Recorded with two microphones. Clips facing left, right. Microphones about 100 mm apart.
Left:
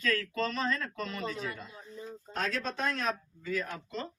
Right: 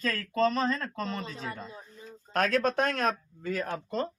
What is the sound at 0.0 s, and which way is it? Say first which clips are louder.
Speech: right 4 dB; 35° right (ahead or behind).